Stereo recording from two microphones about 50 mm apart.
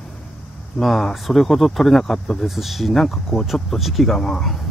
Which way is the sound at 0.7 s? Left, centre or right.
Centre.